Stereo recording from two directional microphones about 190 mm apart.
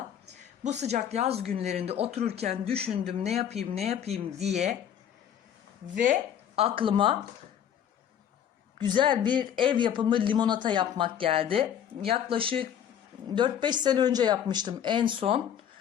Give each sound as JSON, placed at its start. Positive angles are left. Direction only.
{"t": 0.3, "sound": "speech", "side_deg": -35}
{"t": 5.9, "sound": "a woman's voice", "side_deg": -45}
{"t": 6.6, "sound": "speech", "side_deg": -30}
{"t": 9.0, "sound": "speech", "side_deg": -25}